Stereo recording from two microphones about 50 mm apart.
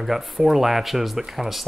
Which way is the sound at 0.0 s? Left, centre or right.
Centre.